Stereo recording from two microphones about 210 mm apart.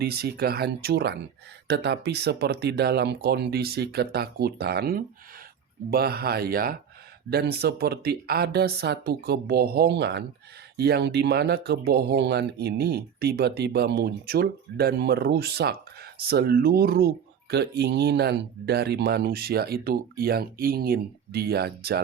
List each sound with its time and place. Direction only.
0.0 s speech: 50° right (ahead or behind)